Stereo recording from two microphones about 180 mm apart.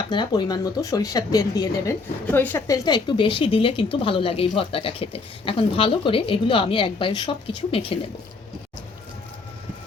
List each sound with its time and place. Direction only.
0.1 s a woman's voice: 25° left (ahead or behind)